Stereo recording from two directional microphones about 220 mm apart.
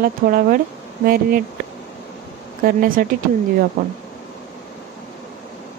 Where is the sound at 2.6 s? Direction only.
40° right (ahead or behind).